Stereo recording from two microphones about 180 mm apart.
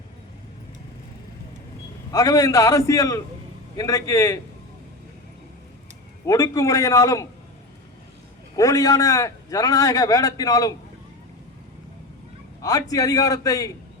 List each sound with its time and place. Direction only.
2.1 s a man's voice: 20° left (ahead or behind)
6.2 s a man's voice: 20° left (ahead or behind)
8.5 s a man's voice: 20° left (ahead or behind)
12.6 s a man's voice: 20° left (ahead or behind)